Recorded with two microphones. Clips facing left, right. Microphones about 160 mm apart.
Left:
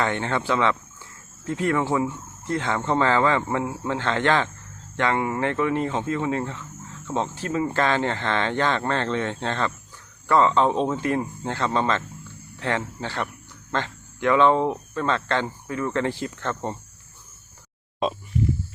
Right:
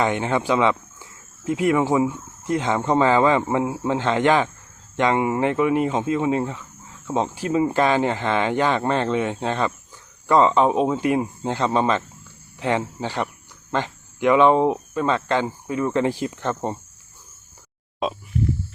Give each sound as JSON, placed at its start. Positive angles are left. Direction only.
{"t": 0.0, "sound": "speech", "side_deg": -15}
{"t": 18.0, "sound": "speech", "side_deg": 0}